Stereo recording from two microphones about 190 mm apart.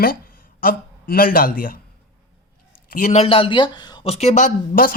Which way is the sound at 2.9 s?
40° left (ahead or behind).